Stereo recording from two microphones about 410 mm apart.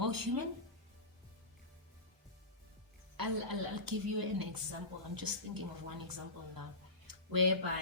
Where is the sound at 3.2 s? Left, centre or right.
Right.